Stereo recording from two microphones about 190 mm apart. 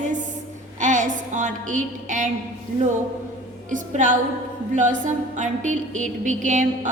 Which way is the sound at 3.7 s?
40° right (ahead or behind).